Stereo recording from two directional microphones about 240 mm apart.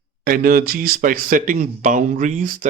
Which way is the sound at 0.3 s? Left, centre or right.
Right.